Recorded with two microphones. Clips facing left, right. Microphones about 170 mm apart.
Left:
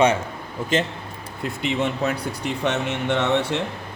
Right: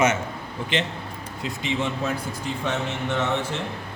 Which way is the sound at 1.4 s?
60° left (ahead or behind).